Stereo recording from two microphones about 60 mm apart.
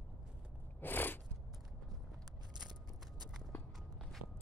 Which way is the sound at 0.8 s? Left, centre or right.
Left.